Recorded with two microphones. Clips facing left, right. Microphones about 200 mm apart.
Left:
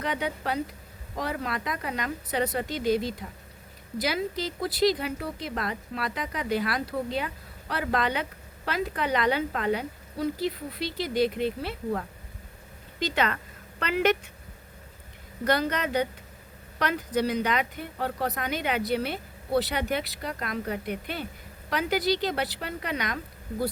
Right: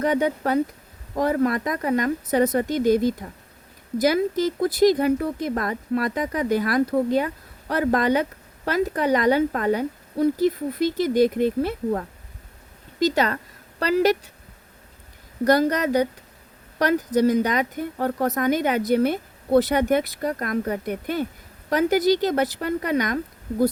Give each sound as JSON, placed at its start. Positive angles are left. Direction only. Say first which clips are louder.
{"t": 0.0, "sound": "a woman's voice", "louder": "right 9 dB", "side_deg": -45}
{"t": 15.4, "sound": "a woman's voice", "louder": "right 7 dB", "side_deg": -40}